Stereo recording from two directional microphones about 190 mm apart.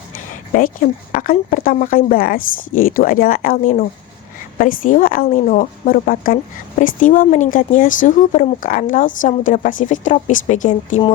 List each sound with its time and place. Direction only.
1.1 s a woman's voice: 50° left (ahead or behind)